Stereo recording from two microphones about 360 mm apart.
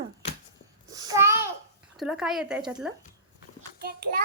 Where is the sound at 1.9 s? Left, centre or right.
Centre.